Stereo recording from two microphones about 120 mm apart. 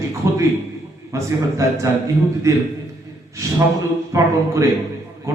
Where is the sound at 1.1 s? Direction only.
25° right (ahead or behind).